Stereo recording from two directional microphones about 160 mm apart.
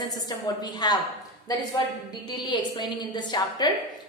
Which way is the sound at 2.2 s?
25° left (ahead or behind).